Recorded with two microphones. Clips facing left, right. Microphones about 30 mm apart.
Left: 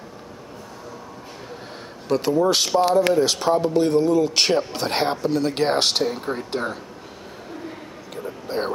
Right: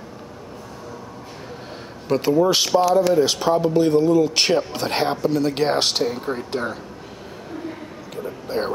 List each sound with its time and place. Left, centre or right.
2.0 s speech: centre
2.8 s speech: left
3.2 s speech: centre
8.2 s a sound: centre